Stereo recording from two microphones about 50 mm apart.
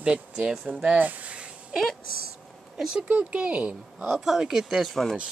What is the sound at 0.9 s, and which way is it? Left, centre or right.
Speech, right.